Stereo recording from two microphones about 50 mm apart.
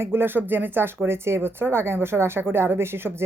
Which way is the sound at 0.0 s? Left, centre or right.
Right.